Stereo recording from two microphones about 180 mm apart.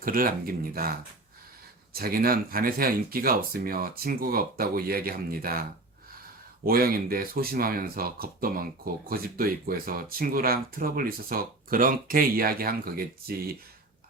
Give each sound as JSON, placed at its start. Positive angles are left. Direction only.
{"t": 0.0, "sound": "speech", "side_deg": -55}
{"t": 2.0, "sound": "speech", "side_deg": -55}
{"t": 6.7, "sound": "speech", "side_deg": -55}